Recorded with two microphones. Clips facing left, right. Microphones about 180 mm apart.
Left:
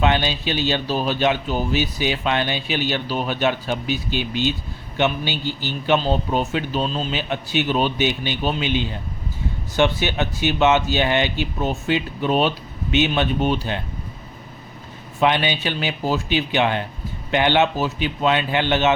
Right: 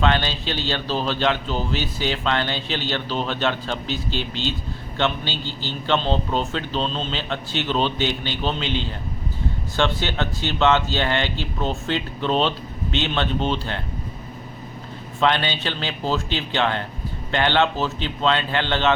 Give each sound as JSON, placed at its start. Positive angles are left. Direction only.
{"t": 0.0, "sound": "speech", "side_deg": 15}
{"t": 15.2, "sound": "speech", "side_deg": 15}